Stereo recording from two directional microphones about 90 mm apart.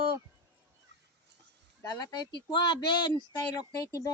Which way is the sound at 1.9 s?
50° left (ahead or behind).